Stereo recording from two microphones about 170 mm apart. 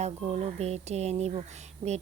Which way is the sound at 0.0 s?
35° right (ahead or behind).